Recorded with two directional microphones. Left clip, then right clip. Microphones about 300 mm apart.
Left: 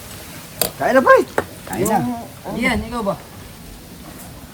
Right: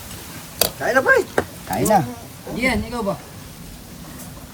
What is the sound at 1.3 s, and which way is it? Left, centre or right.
Speech, centre.